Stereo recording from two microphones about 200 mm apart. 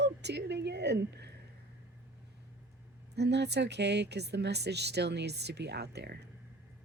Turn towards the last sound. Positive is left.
turn(degrees=-55)  # may be behind; listen again after turning